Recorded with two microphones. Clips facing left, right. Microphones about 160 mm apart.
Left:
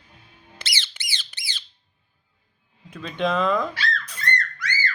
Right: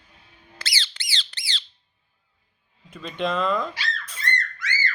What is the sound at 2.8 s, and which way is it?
Speech, 5° right (ahead or behind).